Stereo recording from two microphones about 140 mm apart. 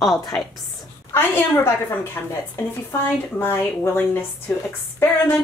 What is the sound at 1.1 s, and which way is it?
Speech, 15° left (ahead or behind).